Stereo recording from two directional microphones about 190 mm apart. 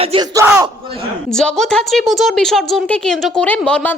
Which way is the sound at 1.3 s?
5° left (ahead or behind).